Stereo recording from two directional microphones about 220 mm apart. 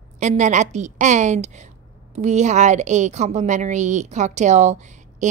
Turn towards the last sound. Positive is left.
turn(degrees=-35)  # may be behind; listen again after turning